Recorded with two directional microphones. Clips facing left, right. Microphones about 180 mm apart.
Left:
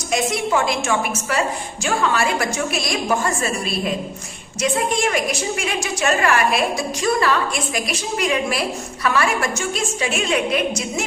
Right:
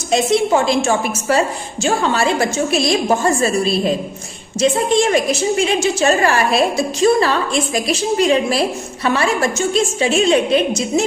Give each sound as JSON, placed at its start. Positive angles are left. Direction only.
{"t": 0.1, "sound": "a woman's voice", "side_deg": -30}